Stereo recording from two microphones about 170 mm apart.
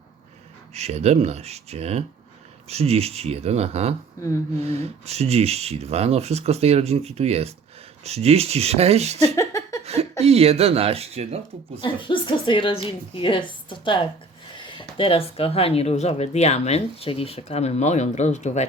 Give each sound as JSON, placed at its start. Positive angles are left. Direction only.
{"t": 0.7, "sound": "speech", "side_deg": -40}
{"t": 9.2, "sound": "a sound", "side_deg": 20}
{"t": 9.8, "sound": "speech", "side_deg": -40}
{"t": 11.8, "sound": "a woman's voice", "side_deg": 30}